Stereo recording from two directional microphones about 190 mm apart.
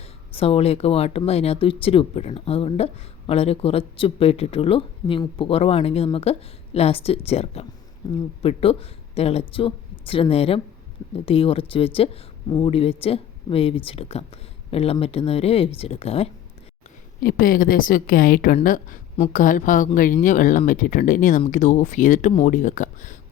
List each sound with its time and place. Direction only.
0.3 s speech: 30° left (ahead or behind)
17.2 s a woman's voice: 50° left (ahead or behind)